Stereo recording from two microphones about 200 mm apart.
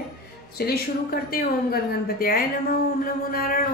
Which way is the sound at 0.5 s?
50° left (ahead or behind).